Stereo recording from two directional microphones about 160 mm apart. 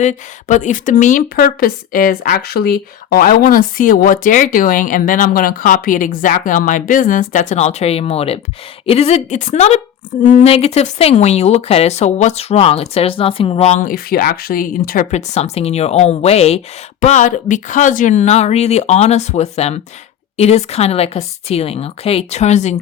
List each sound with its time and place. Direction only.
0.0 s a woman's voice: 50° left (ahead or behind)
13.9 s a woman's voice: 65° left (ahead or behind)
15.1 s speech: 45° left (ahead or behind)